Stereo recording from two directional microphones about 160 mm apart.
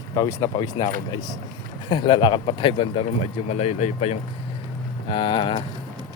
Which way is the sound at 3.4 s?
45° left (ahead or behind).